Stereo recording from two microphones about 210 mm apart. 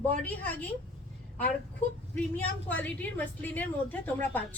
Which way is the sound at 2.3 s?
5° left (ahead or behind).